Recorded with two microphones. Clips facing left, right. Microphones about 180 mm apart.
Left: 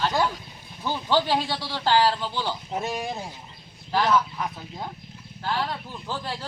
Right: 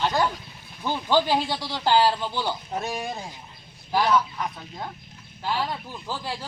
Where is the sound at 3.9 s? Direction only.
10° right (ahead or behind).